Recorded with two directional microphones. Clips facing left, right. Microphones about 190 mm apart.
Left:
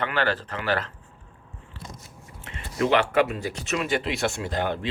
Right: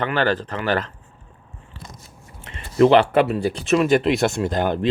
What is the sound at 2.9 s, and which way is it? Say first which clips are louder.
A man's voice: right 6 dB; 35° right (ahead or behind).